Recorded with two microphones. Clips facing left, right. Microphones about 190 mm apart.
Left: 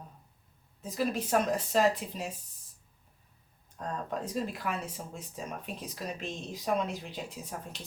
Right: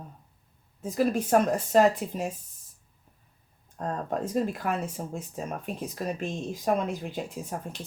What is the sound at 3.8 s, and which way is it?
Speech, 50° right (ahead or behind).